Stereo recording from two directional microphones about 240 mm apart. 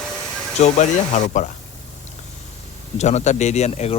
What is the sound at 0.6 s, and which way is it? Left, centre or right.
Speech, left.